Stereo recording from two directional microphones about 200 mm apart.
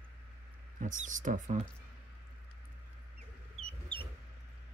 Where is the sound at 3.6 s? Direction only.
30° right (ahead or behind).